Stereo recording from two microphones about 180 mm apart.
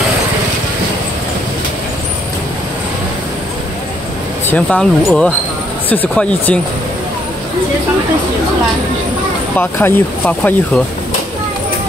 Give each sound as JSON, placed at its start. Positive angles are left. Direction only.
{"t": 4.5, "sound": "speech", "side_deg": 5}
{"t": 9.6, "sound": "speech", "side_deg": 10}